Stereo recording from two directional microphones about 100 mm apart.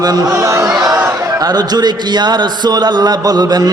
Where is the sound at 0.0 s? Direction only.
40° right (ahead or behind).